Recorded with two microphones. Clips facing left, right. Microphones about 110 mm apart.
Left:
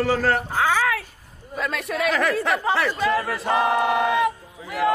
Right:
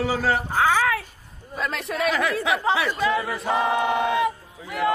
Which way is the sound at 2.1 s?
Centre (ahead or behind).